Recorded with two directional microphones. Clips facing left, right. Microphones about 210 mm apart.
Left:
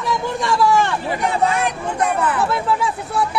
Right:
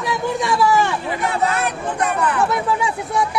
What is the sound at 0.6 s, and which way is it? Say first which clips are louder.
Speech: left 1 dB; 5° right (ahead or behind).